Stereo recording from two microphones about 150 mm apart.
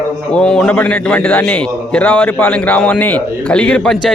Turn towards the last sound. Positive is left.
turn(degrees=5)  # may be behind; listen again after turning